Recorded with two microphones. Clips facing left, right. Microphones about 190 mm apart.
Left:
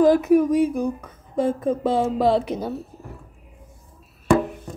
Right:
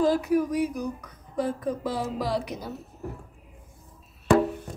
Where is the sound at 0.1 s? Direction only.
20° left (ahead or behind).